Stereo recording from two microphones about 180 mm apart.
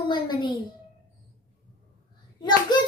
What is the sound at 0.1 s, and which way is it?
Speech, 25° left (ahead or behind).